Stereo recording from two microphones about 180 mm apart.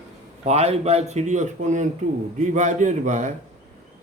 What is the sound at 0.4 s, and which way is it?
A man's voice, 35° right (ahead or behind).